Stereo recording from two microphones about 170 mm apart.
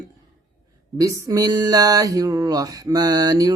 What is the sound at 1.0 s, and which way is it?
Mantra, 20° right (ahead or behind).